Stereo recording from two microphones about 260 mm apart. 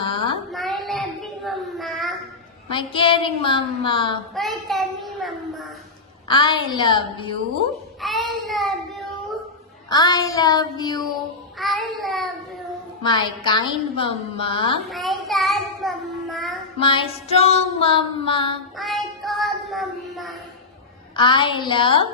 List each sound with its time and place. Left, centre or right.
0.0 s a sound: centre
0.5 s child singing: centre
2.9 s a woman's voice: centre
4.4 s a child's voice: centre
6.2 s a woman's voice: centre
8.0 s child singing: centre
9.8 s a woman's voice: centre
11.5 s child singing: centre
13.0 s a woman's voice: centre
14.9 s child singing: centre
16.8 s a woman's voice: left
18.8 s child singing: centre
21.2 s a woman's voice: centre